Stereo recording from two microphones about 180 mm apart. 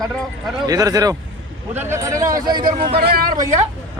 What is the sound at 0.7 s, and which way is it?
Speech, 20° right (ahead or behind).